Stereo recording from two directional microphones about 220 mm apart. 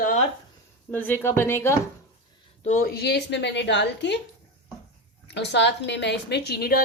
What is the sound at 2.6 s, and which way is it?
A woman's voice, 35° left (ahead or behind).